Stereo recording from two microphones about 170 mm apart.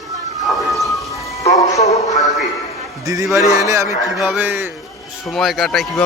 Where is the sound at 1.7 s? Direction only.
40° left (ahead or behind).